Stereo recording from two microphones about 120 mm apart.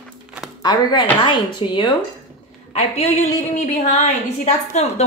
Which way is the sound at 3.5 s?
90° left.